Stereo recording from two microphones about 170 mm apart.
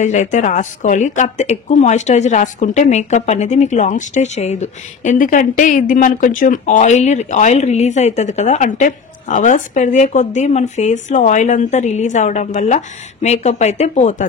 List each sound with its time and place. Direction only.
0.0 s speech: 45° left (ahead or behind)